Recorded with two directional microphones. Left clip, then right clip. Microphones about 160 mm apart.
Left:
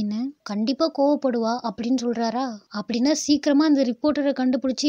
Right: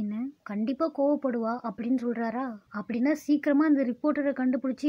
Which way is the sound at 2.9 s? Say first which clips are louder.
Left 5 dB; 45° left (ahead or behind).